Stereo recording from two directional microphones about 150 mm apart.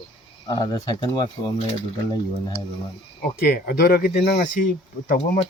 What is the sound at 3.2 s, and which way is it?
Speech, 90° left.